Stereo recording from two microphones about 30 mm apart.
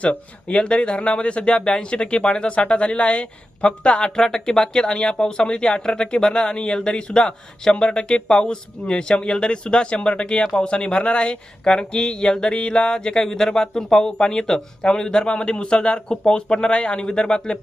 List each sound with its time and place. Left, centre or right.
0.0 s speech: left
12.5 s speech: left
13.2 s speech: centre